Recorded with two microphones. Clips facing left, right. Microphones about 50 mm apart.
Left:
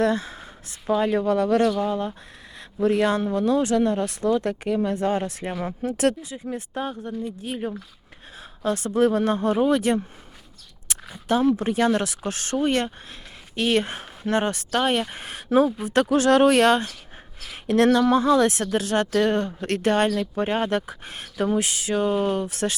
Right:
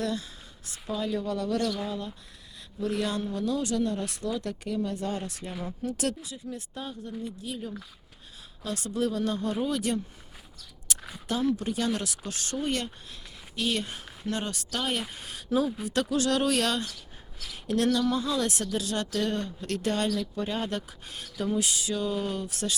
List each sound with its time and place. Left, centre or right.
0.0 s a woman's voice: left
10.9 s a sound: left
11.3 s a woman's voice: left